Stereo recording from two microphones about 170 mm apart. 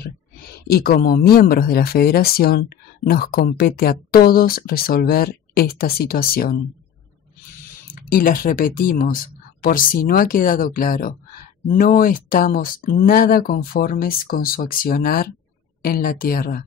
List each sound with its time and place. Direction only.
0.7 s speech: 60° left (ahead or behind)
7.9 s speech: 55° left (ahead or behind)